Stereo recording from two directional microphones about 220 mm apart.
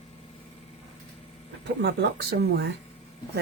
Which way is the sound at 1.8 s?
45° right (ahead or behind).